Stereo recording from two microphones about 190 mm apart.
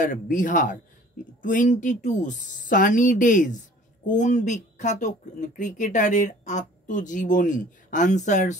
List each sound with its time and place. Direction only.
0.0 s speech: 45° left (ahead or behind)